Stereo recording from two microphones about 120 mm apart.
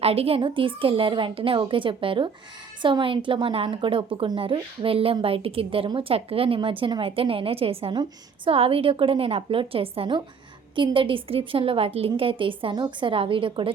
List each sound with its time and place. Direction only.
0.0 s a woman's voice: 55° right (ahead or behind)